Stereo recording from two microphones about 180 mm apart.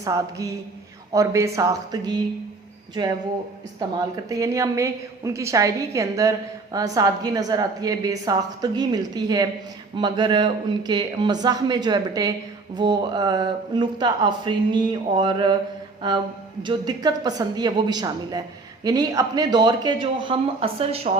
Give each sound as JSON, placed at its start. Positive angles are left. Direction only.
{"t": 0.0, "sound": "a woman's voice", "side_deg": -20}
{"t": 3.8, "sound": "a woman's voice", "side_deg": -20}